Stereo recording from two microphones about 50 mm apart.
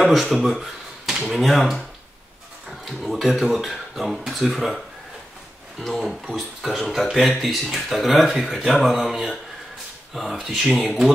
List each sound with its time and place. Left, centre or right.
0.0 s speech: centre
8.9 s speech: centre